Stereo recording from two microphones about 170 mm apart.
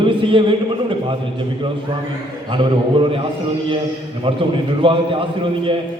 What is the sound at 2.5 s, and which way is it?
Speech, 30° right (ahead or behind).